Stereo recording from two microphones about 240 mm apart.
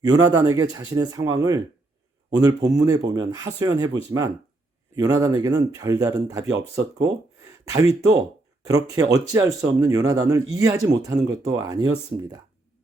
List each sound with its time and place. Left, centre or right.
0.0 s speech: centre
7.6 s speech: centre